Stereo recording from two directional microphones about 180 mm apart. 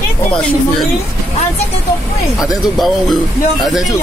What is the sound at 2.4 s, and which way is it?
Speech, centre (ahead or behind).